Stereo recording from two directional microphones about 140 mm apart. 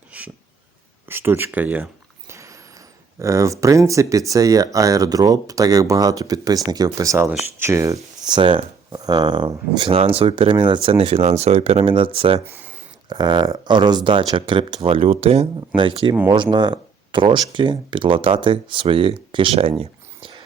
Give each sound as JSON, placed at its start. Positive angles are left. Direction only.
{"t": 1.0, "sound": "speech", "side_deg": -15}
{"t": 3.2, "sound": "speech", "side_deg": -20}
{"t": 8.4, "sound": "speech", "side_deg": -35}
{"t": 19.8, "sound": "a sound", "side_deg": -35}